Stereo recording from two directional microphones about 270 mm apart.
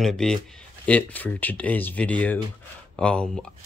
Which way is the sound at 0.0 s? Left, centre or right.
Centre.